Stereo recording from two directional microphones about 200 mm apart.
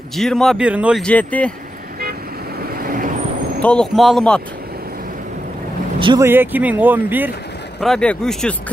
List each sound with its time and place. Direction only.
0.1 s speech: centre (ahead or behind)
1.0 s speech: 5° left (ahead or behind)
2.7 s vehicle: 45° right (ahead or behind)
3.6 s speech: 5° left (ahead or behind)
5.9 s speech: 25° right (ahead or behind)
6.2 s speech: 10° right (ahead or behind)
7.8 s speech: 5° left (ahead or behind)